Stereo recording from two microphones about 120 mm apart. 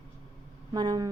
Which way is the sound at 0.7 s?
35° right (ahead or behind).